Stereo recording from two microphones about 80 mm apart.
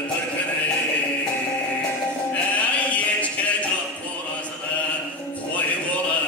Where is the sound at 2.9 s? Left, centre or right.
Centre.